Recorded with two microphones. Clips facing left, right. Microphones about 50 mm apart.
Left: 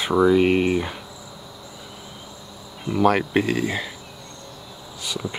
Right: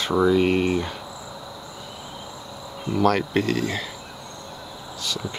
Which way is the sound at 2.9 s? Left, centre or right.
Centre.